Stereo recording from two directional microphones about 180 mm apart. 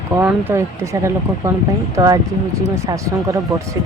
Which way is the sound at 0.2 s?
10° right (ahead or behind).